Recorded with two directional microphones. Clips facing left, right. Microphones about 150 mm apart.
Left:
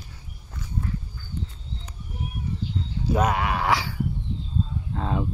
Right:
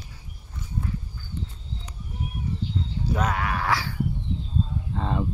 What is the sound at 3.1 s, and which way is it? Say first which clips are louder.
Speech: left 4 dB; 20° left (ahead or behind).